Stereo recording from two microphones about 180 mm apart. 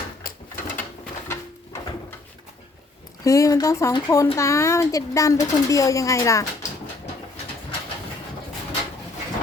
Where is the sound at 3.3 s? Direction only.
20° left (ahead or behind).